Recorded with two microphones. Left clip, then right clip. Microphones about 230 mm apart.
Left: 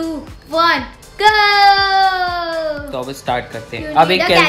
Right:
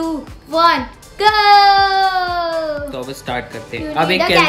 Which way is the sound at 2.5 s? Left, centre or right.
Centre.